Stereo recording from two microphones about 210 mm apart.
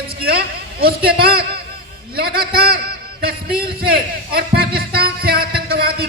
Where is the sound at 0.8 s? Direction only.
45° right (ahead or behind).